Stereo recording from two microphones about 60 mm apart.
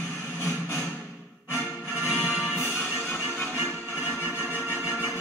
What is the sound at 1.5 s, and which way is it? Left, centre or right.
Music, left.